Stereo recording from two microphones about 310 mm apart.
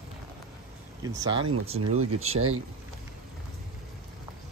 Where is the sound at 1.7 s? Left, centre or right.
Right.